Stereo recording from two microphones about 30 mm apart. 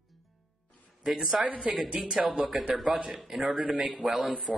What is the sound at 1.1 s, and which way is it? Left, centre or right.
Speech, centre.